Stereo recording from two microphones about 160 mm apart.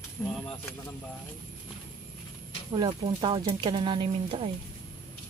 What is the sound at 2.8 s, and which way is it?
Speech, 30° right (ahead or behind).